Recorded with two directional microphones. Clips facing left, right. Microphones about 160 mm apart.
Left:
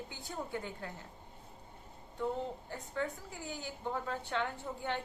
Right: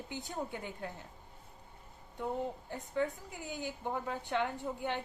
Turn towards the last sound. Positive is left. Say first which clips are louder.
# right 2 dB
turn(degrees=-15)  # may be behind; listen again after turning